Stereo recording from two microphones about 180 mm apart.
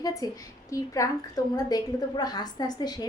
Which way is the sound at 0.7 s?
20° left (ahead or behind).